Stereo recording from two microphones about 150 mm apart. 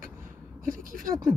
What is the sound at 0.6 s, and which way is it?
Speech, 65° right (ahead or behind).